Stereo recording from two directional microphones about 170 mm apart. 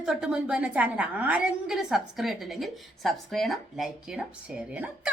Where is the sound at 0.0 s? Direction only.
5° right (ahead or behind).